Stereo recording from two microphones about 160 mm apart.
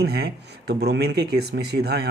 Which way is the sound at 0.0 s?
85° right.